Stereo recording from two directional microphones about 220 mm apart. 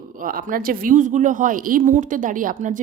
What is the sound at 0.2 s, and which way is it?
A woman's voice, 40° right (ahead or behind).